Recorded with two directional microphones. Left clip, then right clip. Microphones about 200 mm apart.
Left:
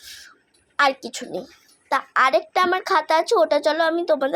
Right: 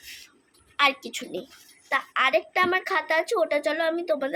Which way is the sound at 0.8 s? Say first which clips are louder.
Left 3 dB; 20° left (ahead or behind).